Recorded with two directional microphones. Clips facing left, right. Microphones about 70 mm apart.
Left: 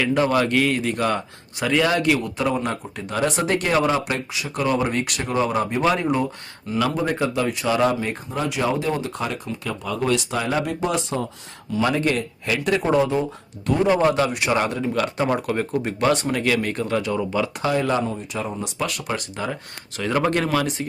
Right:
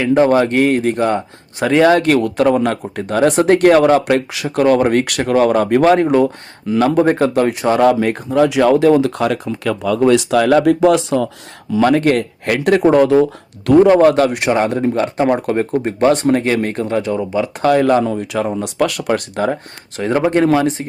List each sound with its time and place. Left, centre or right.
0.0 s speech: right
2.2 s a man's voice: right
2.6 s speech: right
7.9 s speech: right
11.8 s a man's voice: right
14.0 s speech: right
14.5 s speech: right
17.6 s speech: right
18.0 s a man's voice: right
18.4 s speech: right
20.0 s speech: right